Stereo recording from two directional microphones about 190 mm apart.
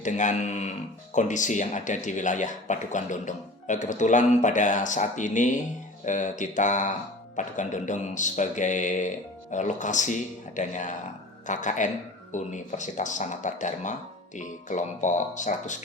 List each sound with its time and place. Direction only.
0.0 s speech: 40° left (ahead or behind)